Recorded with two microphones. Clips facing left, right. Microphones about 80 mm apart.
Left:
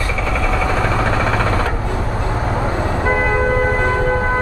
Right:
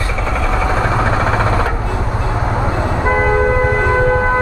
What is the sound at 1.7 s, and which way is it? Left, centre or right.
Church bell, centre.